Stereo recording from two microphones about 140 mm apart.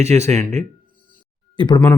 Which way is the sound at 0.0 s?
20° left (ahead or behind).